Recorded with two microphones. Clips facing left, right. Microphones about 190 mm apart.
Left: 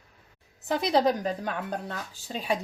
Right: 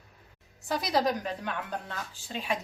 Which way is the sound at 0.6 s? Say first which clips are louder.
Left 4 dB; 25° left (ahead or behind).